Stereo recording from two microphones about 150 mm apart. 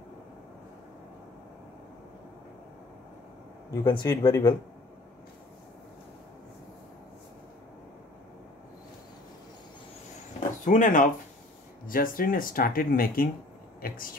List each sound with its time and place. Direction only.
3.9 s speech: 30° left (ahead or behind)
10.6 s speech: 60° left (ahead or behind); by 14.0 s 75° left (ahead or behind)